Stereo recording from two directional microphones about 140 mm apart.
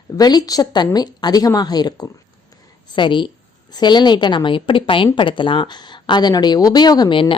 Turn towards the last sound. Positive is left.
turn(degrees=35)  # may be behind; listen again after turning